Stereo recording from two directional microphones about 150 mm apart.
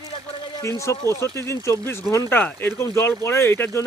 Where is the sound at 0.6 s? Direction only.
20° left (ahead or behind).